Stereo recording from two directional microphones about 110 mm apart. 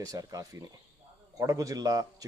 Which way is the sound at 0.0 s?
35° right (ahead or behind).